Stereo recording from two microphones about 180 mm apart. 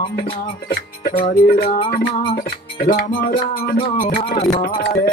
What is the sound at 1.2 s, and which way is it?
Music, 40° left (ahead or behind).